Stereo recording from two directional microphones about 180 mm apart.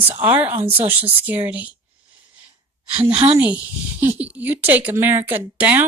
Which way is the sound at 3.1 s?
35° right (ahead or behind).